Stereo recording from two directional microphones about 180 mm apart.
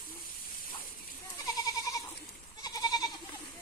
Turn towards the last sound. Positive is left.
turn(degrees=25)  # may be behind; listen again after turning